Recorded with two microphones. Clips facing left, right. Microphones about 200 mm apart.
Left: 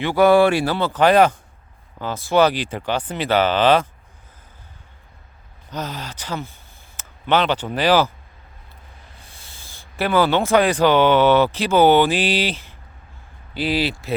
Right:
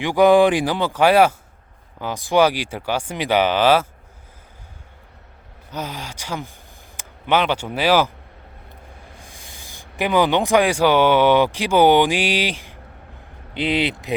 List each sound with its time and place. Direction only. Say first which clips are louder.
0.0 s speech: right 1 dB; 15° right (ahead or behind)
5.7 s speech: left 1 dB; 10° right (ahead or behind)
9.1 s speech: right 4 dB; 15° right (ahead or behind)